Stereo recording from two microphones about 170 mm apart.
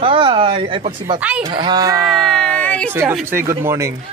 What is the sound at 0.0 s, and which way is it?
Speech, 30° right (ahead or behind).